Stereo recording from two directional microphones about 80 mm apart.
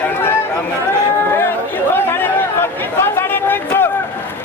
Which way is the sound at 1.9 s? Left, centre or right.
Left.